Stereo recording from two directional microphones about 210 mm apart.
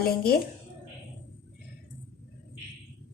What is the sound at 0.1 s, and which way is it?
Speech, 50° left (ahead or behind).